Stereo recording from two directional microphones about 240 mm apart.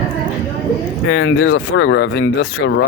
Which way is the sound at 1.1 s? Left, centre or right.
Left.